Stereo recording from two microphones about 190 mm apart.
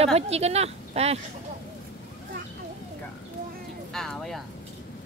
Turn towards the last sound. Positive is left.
turn(degrees=0)  # may be behind; listen again after turning